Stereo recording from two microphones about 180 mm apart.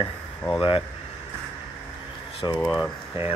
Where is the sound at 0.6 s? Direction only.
30° left (ahead or behind).